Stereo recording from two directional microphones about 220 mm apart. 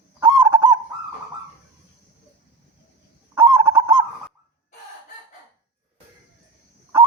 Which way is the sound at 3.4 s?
15° right (ahead or behind).